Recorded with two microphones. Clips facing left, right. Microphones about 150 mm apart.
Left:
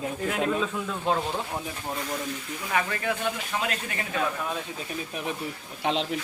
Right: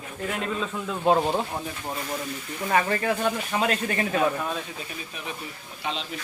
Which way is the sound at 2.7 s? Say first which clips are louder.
Right 4 dB; 40° right (ahead or behind).